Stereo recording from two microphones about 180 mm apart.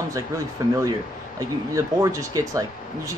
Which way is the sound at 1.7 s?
20° right (ahead or behind).